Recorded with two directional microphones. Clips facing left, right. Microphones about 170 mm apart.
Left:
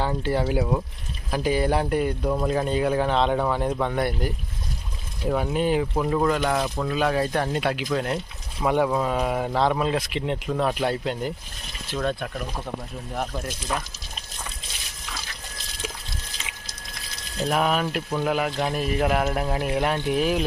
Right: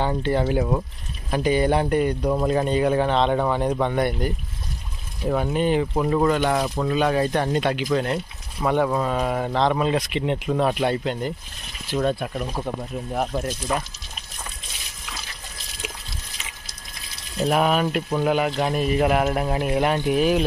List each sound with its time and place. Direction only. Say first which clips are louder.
0.0 s speech: right 2 dB; 5° left (ahead or behind)
5.3 s speech: right 1 dB; 5° left (ahead or behind)
11.9 s speech: right 4 dB; 10° right (ahead or behind)
13.7 s speech: right 3 dB; 5° right (ahead or behind)
17.5 s speech: right 3 dB; 5° right (ahead or behind)